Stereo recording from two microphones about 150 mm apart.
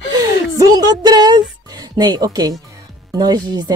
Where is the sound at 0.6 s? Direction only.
25° right (ahead or behind).